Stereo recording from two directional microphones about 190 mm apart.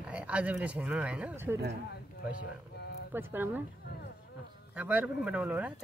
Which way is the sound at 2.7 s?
60° left (ahead or behind).